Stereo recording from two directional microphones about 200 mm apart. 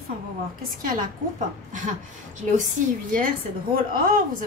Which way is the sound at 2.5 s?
40° right (ahead or behind).